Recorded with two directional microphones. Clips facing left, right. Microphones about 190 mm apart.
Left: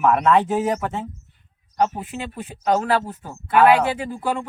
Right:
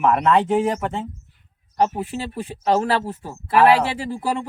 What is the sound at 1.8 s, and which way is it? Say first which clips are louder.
Speech: right 1 dB; 30° right (ahead or behind).